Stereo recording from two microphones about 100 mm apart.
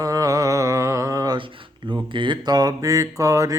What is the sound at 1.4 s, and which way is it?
Speech, 50° right (ahead or behind).